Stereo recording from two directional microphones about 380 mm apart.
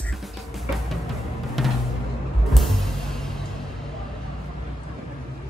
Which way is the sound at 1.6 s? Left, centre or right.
Centre.